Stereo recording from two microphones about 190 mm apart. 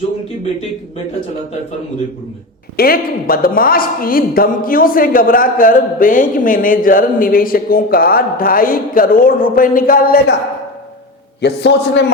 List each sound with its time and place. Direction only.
2.7 s a woman's voice: 50° left (ahead or behind)
11.3 s a man's voice: 65° left (ahead or behind)